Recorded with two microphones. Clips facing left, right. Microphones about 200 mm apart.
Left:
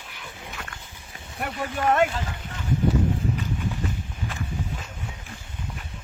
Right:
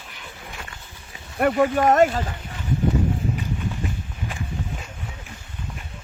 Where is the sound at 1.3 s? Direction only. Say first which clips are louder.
Right 11 dB; 55° right (ahead or behind).